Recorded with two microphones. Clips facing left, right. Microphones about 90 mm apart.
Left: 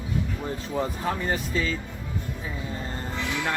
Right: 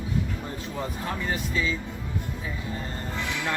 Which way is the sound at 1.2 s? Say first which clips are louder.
Left 1 dB; 35° left (ahead or behind).